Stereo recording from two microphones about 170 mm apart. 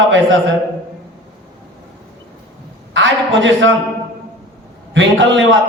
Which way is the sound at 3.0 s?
90° right.